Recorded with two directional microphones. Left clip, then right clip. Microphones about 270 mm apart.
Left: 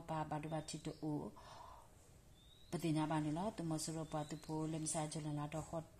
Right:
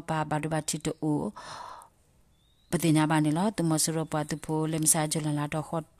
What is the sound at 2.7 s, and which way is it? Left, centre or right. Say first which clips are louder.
Speech: right 15 dB; right.